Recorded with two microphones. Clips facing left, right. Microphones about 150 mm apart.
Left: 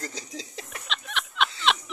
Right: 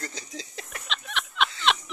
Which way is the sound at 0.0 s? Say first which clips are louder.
Left 1 dB; 30° left (ahead or behind).